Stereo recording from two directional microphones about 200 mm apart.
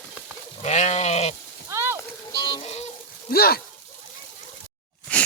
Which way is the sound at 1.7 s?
10° right (ahead or behind).